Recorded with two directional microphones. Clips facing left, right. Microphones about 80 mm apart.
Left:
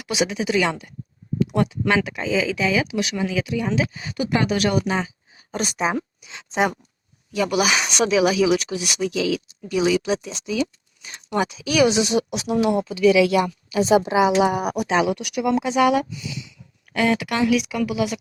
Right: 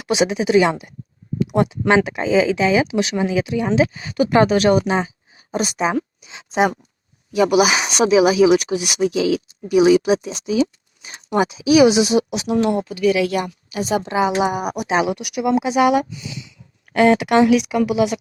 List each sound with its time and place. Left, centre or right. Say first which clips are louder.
0.0 s speech: right 5 dB; right
3.9 s speech: right 7 dB; right
4.4 s speech: right 6 dB; right
5.5 s speech: right 3 dB; centre
7.8 s a woman's voice: right 3 dB; right
8.0 s speech: right 5 dB; centre
9.0 s speech: right 4 dB; right
9.6 s speech: right 7 dB; centre
11.3 s speech: right 7 dB; centre
12.9 s speech: left 2 dB; right
13.8 s a woman's voice: left 4 dB; left
14.1 s speech: left 1 dB; centre
14.9 s speech: right 2 dB; centre